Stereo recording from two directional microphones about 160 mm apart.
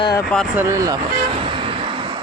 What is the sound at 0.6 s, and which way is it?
Speech, 20° right (ahead or behind).